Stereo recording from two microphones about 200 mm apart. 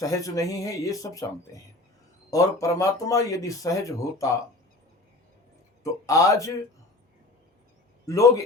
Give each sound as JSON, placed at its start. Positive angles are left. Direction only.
{"t": 0.0, "sound": "speech", "side_deg": 15}
{"t": 2.3, "sound": "speech", "side_deg": 15}
{"t": 5.8, "sound": "speech", "side_deg": 15}
{"t": 8.0, "sound": "speech", "side_deg": 15}